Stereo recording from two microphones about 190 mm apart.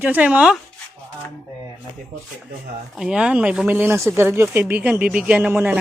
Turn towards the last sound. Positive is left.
turn(degrees=-10)  # may be behind; listen again after turning